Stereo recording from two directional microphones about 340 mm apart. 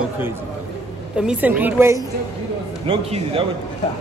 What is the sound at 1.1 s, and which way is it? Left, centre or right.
A man's voice, centre.